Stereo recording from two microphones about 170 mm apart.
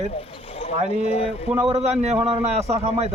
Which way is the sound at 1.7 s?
40° right (ahead or behind).